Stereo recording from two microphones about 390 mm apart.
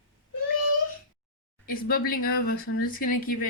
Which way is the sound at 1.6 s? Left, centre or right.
Left.